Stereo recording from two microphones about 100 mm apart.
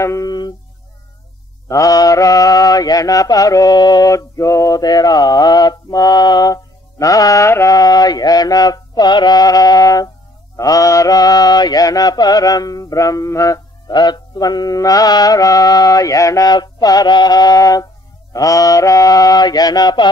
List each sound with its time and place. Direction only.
0.0 s music: 30° left (ahead or behind)
1.7 s mantra: 35° left (ahead or behind)
13.8 s mantra: 45° left (ahead or behind)